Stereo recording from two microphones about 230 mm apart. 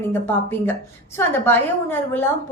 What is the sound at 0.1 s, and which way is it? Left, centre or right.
A woman's voice, centre.